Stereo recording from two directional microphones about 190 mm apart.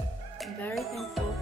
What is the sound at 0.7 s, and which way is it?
Music, centre (ahead or behind).